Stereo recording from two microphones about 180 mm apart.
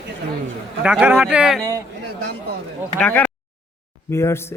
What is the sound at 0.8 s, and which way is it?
Speech, 5° right (ahead or behind).